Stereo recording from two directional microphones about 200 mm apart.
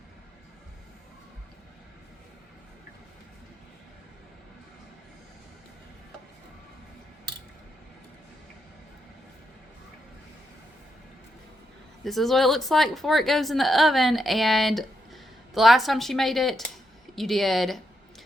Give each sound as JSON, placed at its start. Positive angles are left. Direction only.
{"t": 12.0, "sound": "speech", "side_deg": 0}